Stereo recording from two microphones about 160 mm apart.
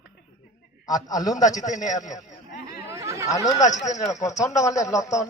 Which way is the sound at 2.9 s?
20° right (ahead or behind).